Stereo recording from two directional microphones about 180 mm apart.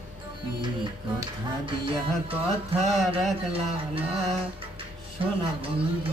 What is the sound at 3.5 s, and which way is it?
Music, 30° right (ahead or behind).